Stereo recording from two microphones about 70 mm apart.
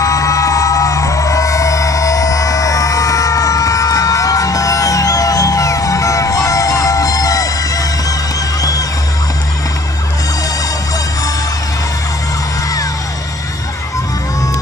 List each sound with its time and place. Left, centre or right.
0.0 s music: left